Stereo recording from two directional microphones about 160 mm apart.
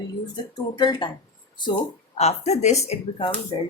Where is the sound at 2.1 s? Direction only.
40° left (ahead or behind).